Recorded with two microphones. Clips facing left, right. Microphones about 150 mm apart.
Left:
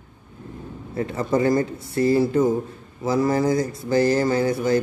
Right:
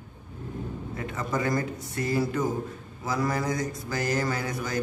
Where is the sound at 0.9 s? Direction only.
30° left (ahead or behind).